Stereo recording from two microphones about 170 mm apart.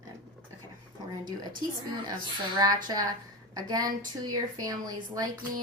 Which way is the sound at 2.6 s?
20° right (ahead or behind).